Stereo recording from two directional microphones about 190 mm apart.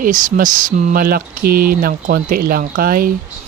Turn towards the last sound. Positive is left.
turn(degrees=-50)  # may be behind; listen again after turning